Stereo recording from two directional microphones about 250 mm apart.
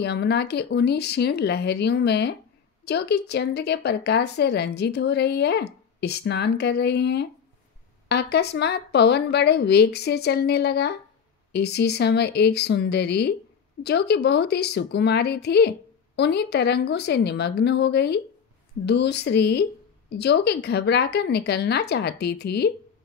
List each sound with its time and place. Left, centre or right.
0.0 s speech: left